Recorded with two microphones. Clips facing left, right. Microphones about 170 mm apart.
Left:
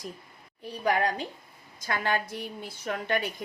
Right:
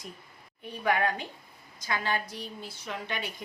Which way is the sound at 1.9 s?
50° left (ahead or behind).